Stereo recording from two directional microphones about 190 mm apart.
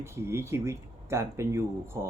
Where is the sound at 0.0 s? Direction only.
15° right (ahead or behind).